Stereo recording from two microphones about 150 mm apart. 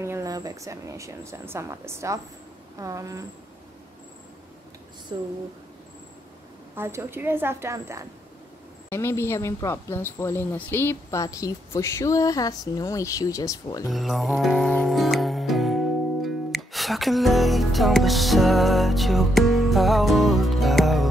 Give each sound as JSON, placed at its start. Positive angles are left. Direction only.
{"t": 0.0, "sound": "speech", "side_deg": -20}
{"t": 5.1, "sound": "a sound", "side_deg": -30}
{"t": 6.7, "sound": "a woman's voice", "side_deg": -15}
{"t": 8.9, "sound": "speech", "side_deg": 15}
{"t": 13.8, "sound": "music", "side_deg": 0}